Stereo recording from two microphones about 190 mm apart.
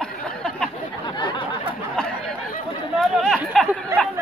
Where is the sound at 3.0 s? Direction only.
5° right (ahead or behind).